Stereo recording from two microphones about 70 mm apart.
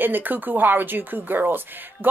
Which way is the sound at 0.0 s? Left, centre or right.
Right.